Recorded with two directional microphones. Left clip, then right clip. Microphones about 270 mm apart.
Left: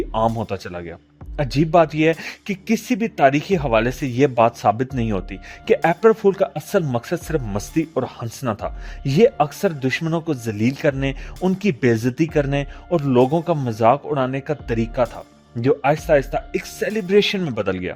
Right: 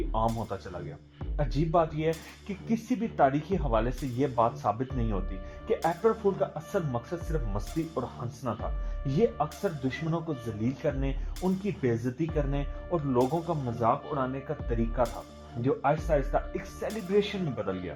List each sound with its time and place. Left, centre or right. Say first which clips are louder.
0.5 s speech: left 9 dB; left